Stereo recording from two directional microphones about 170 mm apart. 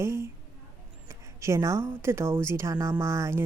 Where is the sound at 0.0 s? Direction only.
15° right (ahead or behind).